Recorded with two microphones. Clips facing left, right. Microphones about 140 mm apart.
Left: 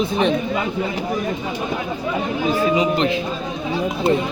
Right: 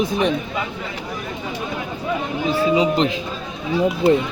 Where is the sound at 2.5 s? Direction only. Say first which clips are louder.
Right 1 dB; 30° right (ahead or behind).